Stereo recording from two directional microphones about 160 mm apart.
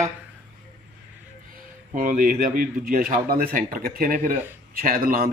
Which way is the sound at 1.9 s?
60° right (ahead or behind).